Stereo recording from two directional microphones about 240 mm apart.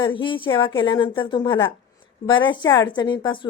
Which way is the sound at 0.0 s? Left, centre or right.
Left.